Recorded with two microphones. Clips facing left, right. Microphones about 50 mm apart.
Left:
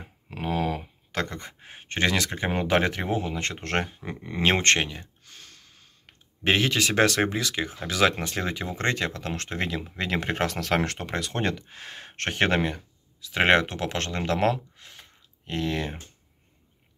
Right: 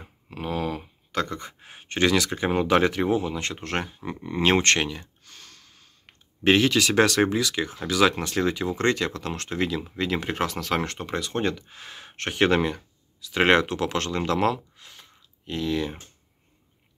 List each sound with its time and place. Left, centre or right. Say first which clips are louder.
0.3 s speech: left 1 dB; left
4.4 s speech: right 1 dB; left
10.9 s speech: right 1 dB; left
11.5 s speech: left 1 dB; left
12.4 s speech: right 4 dB; left